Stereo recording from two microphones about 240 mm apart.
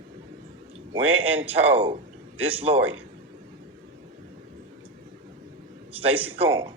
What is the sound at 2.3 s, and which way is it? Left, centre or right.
Speech, centre.